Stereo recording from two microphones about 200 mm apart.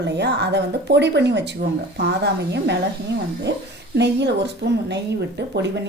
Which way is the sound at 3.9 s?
60° right (ahead or behind).